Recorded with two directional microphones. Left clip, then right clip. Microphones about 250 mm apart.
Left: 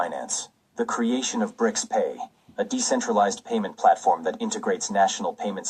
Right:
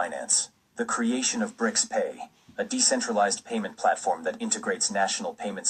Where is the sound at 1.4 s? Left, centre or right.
Left.